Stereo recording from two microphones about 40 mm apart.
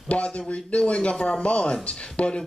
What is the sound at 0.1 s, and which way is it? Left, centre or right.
Speech, left.